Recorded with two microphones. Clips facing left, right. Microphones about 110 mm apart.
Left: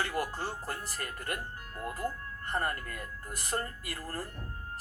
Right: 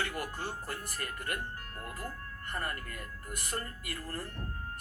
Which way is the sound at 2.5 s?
35° left (ahead or behind).